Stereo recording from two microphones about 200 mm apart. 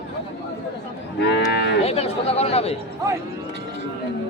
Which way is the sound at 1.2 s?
55° left (ahead or behind).